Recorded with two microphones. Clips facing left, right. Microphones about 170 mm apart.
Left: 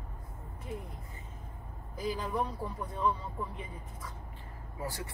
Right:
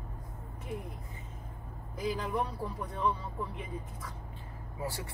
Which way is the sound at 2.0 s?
Centre (ahead or behind).